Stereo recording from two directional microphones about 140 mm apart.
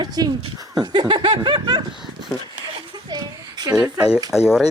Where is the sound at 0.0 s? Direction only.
30° right (ahead or behind).